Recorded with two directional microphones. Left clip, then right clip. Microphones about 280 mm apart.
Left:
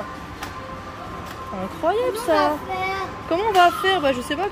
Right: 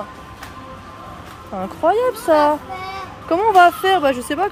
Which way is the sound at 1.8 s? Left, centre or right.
Centre.